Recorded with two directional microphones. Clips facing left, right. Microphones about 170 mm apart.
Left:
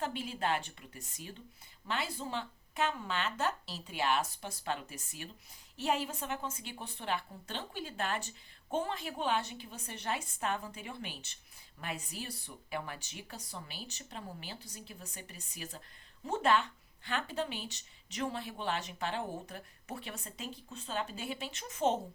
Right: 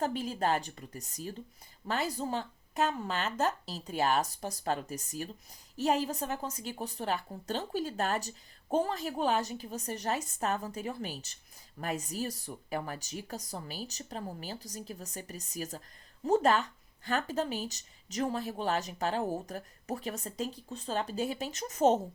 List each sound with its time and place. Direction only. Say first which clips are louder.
0.0 s speech: right 5 dB; 40° right (ahead or behind)